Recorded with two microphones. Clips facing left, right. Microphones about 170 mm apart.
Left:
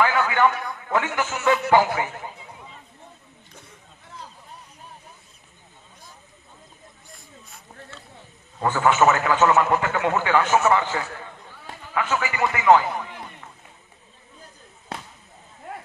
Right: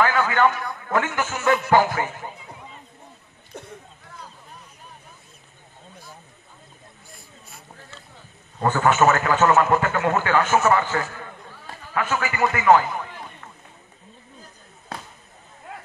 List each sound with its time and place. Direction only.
0.0 s a sound: 15° left (ahead or behind)
0.8 s a man's voice: 15° left (ahead or behind)
8.6 s a man's voice: 15° left (ahead or behind)